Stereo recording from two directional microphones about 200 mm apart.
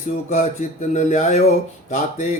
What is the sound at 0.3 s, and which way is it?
Speech, 35° left (ahead or behind).